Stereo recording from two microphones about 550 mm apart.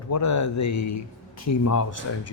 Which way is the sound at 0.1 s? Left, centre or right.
Left.